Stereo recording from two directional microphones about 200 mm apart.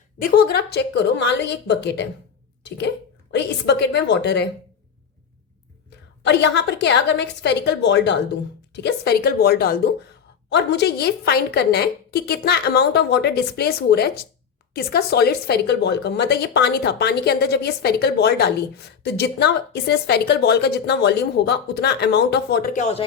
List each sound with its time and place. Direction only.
0.2 s speech: 50° left (ahead or behind)
6.2 s a woman's voice: 60° left (ahead or behind)
22.7 s speech: 35° left (ahead or behind)